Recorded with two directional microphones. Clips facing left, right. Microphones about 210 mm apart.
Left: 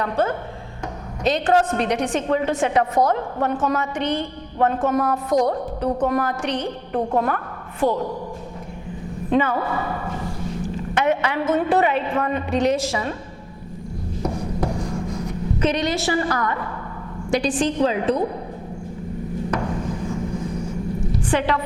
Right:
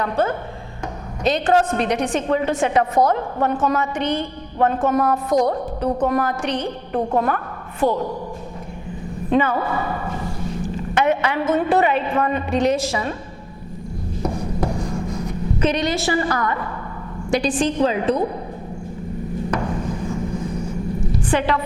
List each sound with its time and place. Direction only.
0.0 s a woman's voice: 15° right (ahead or behind)
9.3 s speech: 15° right (ahead or behind)
10.9 s a woman's voice: 10° right (ahead or behind)
14.2 s writing: 25° right (ahead or behind)
15.6 s a woman's voice: 10° right (ahead or behind)
19.5 s a sound: 20° right (ahead or behind)
21.3 s a woman's voice: 10° right (ahead or behind)